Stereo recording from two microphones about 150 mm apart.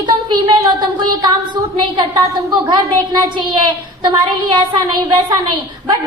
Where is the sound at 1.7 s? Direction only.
30° right (ahead or behind).